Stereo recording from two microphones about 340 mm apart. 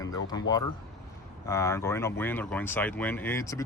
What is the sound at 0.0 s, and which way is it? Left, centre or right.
Speech, centre.